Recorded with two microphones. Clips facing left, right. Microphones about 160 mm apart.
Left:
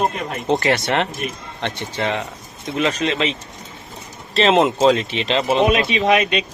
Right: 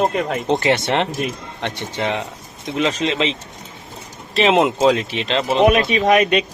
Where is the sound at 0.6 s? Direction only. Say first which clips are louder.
Right 1 dB; 20° right (ahead or behind).